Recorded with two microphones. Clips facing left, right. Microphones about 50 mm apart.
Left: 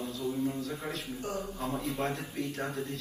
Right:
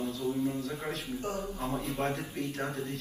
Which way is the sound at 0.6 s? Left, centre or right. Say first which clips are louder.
Right 1 dB; right.